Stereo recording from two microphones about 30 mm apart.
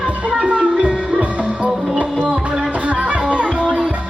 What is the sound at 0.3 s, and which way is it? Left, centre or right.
Music, right.